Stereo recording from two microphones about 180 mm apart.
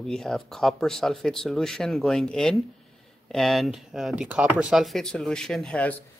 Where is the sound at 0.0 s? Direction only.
5° left (ahead or behind).